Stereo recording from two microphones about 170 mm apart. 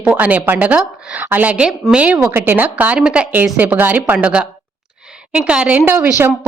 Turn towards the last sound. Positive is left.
turn(degrees=-15)  # may be behind; listen again after turning